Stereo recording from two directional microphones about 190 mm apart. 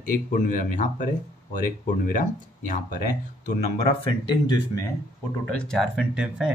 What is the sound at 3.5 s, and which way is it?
Speech, 30° left (ahead or behind).